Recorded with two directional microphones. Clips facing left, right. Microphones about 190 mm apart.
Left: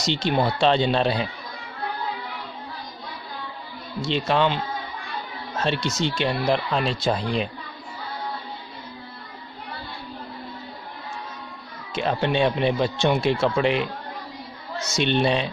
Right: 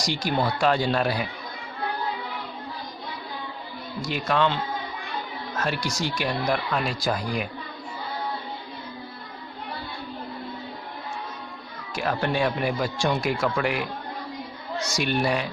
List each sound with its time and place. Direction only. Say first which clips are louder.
0.0 s speech: left 3 dB; 25° left (ahead or behind)
4.0 s speech: left 2 dB; 25° left (ahead or behind)
11.9 s speech: left 3 dB; 20° left (ahead or behind)
14.9 s speech: left 4 dB; 25° left (ahead or behind)